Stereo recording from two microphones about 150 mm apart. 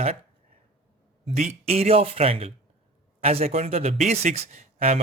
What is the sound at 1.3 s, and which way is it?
A man's voice, 45° right (ahead or behind).